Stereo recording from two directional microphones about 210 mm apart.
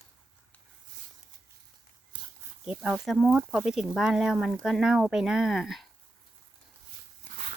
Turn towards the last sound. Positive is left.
turn(degrees=0)  # may be behind; listen again after turning